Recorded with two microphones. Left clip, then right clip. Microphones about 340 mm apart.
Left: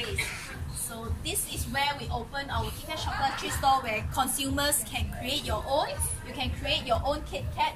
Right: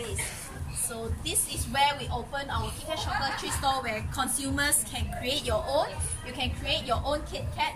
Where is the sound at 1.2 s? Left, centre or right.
Centre.